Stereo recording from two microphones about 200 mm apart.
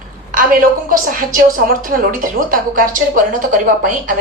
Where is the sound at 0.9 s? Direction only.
45° right (ahead or behind).